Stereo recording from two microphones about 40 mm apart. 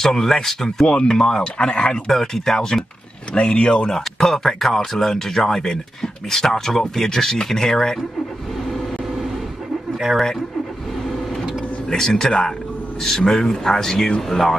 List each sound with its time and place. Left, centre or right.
0.0 s speech: centre
2.0 s speech: centre
11.9 s speech: centre